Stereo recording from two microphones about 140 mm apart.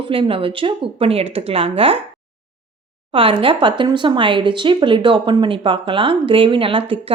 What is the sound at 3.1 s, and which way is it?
A woman's voice, 40° right (ahead or behind).